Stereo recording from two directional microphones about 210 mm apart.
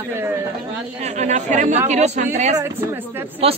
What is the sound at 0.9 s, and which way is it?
Speech, 35° right (ahead or behind).